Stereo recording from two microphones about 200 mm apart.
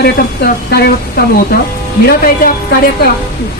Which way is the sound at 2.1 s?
50° left (ahead or behind).